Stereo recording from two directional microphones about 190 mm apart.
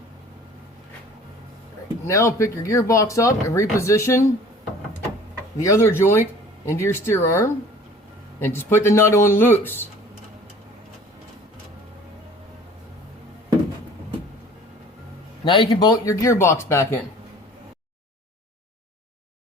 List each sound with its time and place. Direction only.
2.0 s speech: 15° left (ahead or behind)
5.5 s speech: 15° left (ahead or behind)
15.4 s speech: 25° left (ahead or behind)